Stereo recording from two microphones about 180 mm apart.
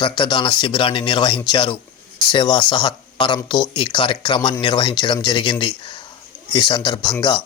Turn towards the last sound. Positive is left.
turn(degrees=25)  # may be behind; listen again after turning